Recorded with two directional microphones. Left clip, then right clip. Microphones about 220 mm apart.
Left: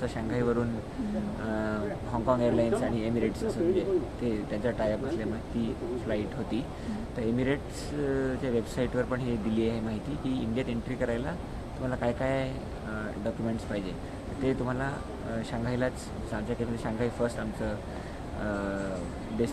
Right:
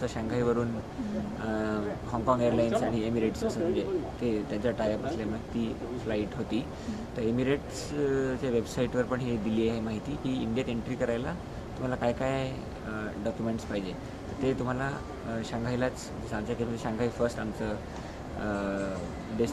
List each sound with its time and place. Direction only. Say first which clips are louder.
0.0 s speech: even; 15° right (ahead or behind)
14.4 s speech: even; 15° right (ahead or behind)